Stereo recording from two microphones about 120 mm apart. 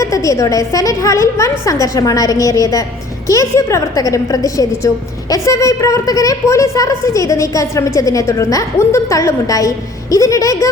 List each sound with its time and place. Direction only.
0.0 s a woman's voice: 25° left (ahead or behind)